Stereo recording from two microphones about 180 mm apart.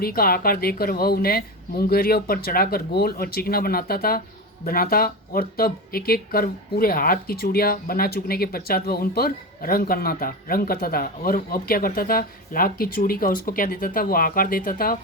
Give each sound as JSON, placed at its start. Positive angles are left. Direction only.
{"t": 0.0, "sound": "speech", "side_deg": 55}